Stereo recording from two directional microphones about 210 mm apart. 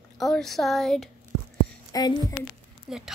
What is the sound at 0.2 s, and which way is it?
Speech, centre (ahead or behind).